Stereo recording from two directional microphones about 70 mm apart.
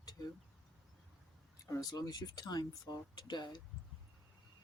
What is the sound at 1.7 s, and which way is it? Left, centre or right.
Speech, left.